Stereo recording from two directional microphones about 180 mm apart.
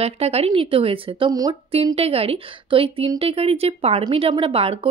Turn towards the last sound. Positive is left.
turn(degrees=-30)  # may be behind; listen again after turning